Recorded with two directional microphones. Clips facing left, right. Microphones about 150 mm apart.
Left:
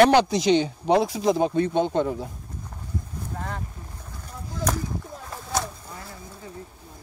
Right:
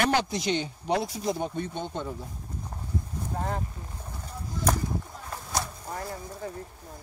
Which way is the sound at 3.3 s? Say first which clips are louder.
Right 3 dB; 30° right (ahead or behind).